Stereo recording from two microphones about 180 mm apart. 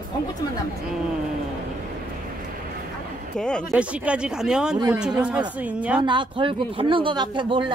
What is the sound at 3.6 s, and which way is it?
A woman's voice, 5° right (ahead or behind).